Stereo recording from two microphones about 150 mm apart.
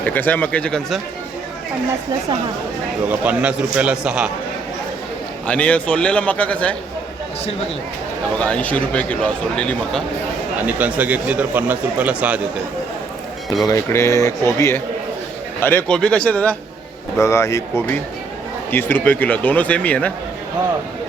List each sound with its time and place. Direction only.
0.0 s a man's voice: 10° left (ahead or behind)
3.1 s a man's voice: 10° right (ahead or behind)
5.5 s a man's voice: 10° left (ahead or behind)
8.4 s a man's voice: 10° left (ahead or behind)
10.7 s a man's voice: 10° right (ahead or behind)
13.7 s a man's voice: 20° left (ahead or behind)